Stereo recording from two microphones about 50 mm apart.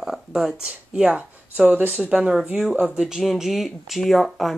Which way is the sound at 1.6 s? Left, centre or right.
Right.